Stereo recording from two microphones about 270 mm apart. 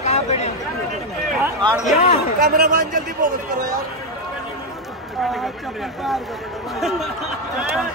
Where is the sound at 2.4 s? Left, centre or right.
Right.